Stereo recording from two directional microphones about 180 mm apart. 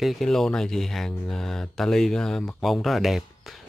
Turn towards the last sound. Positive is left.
turn(degrees=0)  # may be behind; listen again after turning